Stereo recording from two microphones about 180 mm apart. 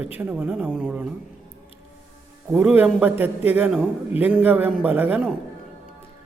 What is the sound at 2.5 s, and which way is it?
Speech, 5° right (ahead or behind).